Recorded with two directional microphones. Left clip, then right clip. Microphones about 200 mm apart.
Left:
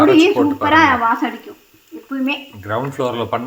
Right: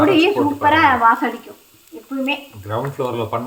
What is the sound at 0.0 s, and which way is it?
Speech, 10° left (ahead or behind).